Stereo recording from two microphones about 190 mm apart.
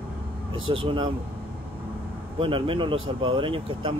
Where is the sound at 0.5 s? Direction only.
90° right.